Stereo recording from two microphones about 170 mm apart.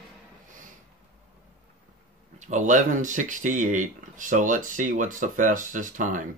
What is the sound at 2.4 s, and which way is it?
Speech, 45° right (ahead or behind).